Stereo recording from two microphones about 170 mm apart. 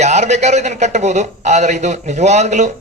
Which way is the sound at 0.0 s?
40° right (ahead or behind).